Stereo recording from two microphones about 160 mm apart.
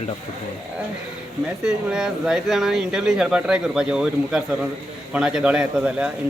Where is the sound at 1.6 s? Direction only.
5° right (ahead or behind).